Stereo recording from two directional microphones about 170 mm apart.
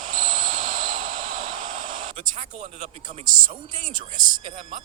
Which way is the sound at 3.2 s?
50° right (ahead or behind).